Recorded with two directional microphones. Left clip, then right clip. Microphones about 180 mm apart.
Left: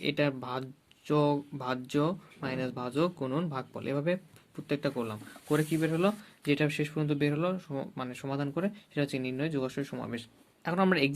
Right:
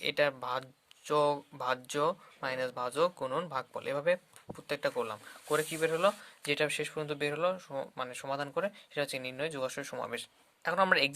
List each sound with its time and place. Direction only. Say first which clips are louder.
0.0 s speech: even; 25° right (ahead or behind)
10.6 s speech: right 1 dB; 20° right (ahead or behind)